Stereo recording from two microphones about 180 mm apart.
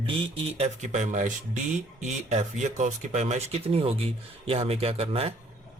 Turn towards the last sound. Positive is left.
turn(degrees=-35)  # may be behind; listen again after turning